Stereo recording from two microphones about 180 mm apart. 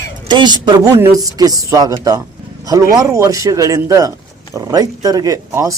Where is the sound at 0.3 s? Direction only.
25° right (ahead or behind).